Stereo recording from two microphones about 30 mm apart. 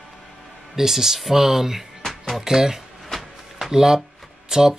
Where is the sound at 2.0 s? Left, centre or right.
Centre.